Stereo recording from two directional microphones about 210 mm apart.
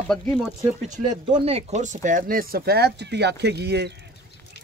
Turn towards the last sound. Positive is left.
turn(degrees=-50)  # may be behind; listen again after turning